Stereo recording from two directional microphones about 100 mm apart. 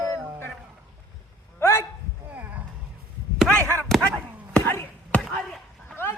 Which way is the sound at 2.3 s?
15° right (ahead or behind).